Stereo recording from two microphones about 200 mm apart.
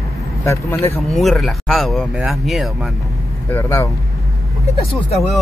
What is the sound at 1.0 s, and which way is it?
Speech, centre (ahead or behind).